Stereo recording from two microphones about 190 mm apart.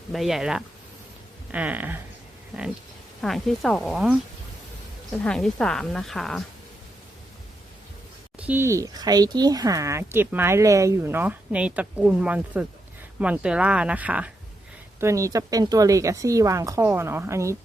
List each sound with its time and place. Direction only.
0.1 s a woman's voice: centre (ahead or behind)
3.2 s a woman's voice: centre (ahead or behind)
8.4 s speech: 10° right (ahead or behind)